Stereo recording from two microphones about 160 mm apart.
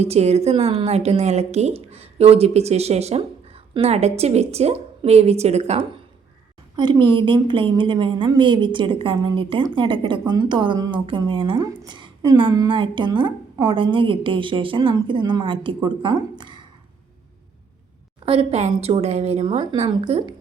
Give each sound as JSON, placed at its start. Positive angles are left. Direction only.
{"t": 0.0, "sound": "a woman's voice", "side_deg": -40}
{"t": 6.7, "sound": "a woman's voice", "side_deg": -30}
{"t": 16.4, "sound": "a sound", "side_deg": -30}
{"t": 18.3, "sound": "a woman's voice", "side_deg": -40}